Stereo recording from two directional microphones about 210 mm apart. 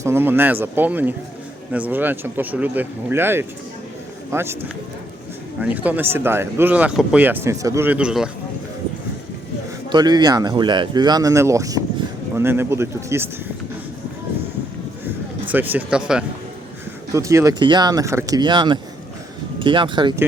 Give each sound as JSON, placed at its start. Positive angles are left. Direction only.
{"t": 0.0, "sound": "speech", "side_deg": -10}
{"t": 5.5, "sound": "speech", "side_deg": -5}
{"t": 9.9, "sound": "speech", "side_deg": -20}
{"t": 15.4, "sound": "speech", "side_deg": -10}